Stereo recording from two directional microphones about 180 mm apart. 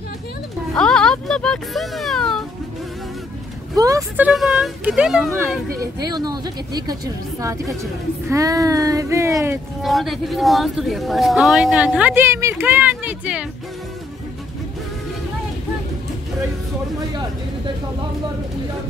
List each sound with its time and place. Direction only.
0.7 s a sound: 5° left (ahead or behind)
3.7 s speech: 20° right (ahead or behind)
4.3 s speech: centre (ahead or behind)
5.8 s speech: 20° right (ahead or behind)
9.8 s speech: centre (ahead or behind)